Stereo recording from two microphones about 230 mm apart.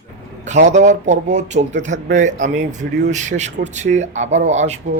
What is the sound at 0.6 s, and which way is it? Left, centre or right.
Speech, right.